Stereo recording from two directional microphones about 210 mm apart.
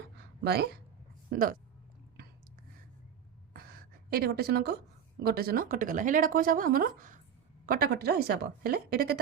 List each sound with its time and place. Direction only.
0.4 s a woman's voice: 50° right (ahead or behind)
4.1 s a woman's voice: 45° right (ahead or behind)